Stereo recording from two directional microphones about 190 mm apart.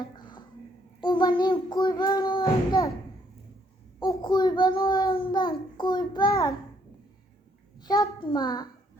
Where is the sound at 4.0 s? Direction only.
20° left (ahead or behind).